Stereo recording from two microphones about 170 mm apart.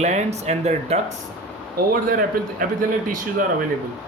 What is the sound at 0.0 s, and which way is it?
Speech, 40° right (ahead or behind).